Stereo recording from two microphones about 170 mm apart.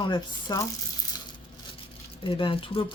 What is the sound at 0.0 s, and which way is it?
Speech, 25° left (ahead or behind).